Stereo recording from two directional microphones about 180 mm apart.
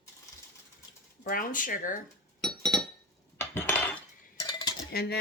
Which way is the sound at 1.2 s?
50° left (ahead or behind).